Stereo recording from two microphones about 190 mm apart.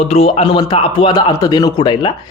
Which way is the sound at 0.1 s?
30° left (ahead or behind).